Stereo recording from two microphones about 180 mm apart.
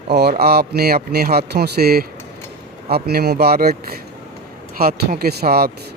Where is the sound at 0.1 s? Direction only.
65° right (ahead or behind).